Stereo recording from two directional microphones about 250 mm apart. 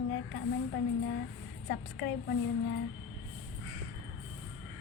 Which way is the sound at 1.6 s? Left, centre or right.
Left.